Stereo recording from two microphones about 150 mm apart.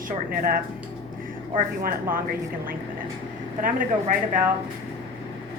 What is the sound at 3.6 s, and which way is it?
Speech, 60° right (ahead or behind).